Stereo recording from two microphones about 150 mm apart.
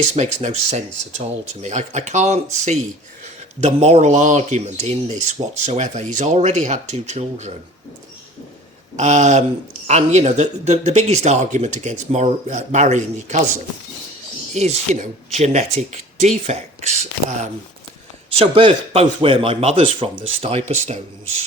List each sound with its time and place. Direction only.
0.1 s speech: 50° right (ahead or behind)
9.0 s speech: 50° right (ahead or behind)
14.5 s speech: 45° right (ahead or behind)
18.3 s speech: 40° right (ahead or behind)